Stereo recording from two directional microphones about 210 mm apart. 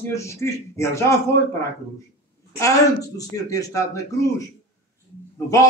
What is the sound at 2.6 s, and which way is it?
Speech, 15° left (ahead or behind).